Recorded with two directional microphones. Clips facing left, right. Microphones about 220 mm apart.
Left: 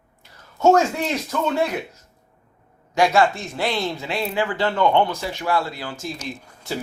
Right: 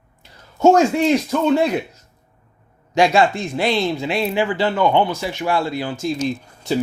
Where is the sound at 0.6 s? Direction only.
10° right (ahead or behind).